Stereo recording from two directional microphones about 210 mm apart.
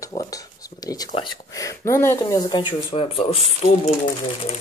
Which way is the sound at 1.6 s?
15° left (ahead or behind).